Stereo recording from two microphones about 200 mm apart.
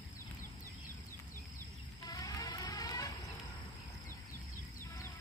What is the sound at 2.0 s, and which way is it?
Vehicle, 20° left (ahead or behind).